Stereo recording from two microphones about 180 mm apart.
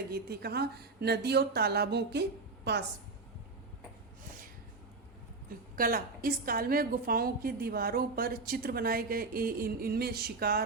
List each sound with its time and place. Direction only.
0.1 s a woman's voice: 60° right (ahead or behind)
5.7 s a woman's voice: 50° right (ahead or behind)